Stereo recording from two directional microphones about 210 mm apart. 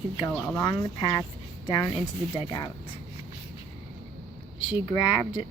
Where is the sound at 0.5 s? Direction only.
20° left (ahead or behind).